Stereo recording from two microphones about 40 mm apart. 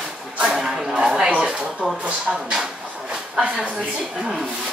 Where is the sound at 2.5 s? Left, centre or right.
Right.